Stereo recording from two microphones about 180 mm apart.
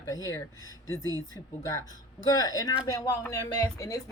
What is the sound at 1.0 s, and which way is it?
Speech, 20° right (ahead or behind).